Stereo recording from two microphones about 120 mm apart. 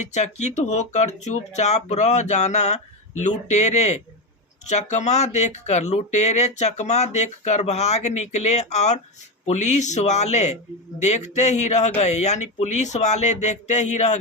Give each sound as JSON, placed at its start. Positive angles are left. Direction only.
{"t": 0.1, "sound": "speech", "side_deg": 75}